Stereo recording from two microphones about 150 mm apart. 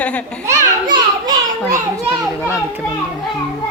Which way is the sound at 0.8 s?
30° right (ahead or behind).